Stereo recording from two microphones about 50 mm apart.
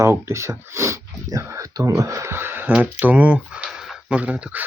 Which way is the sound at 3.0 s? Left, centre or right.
Right.